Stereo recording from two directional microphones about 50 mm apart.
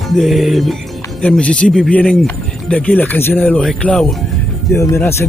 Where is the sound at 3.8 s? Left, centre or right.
Left.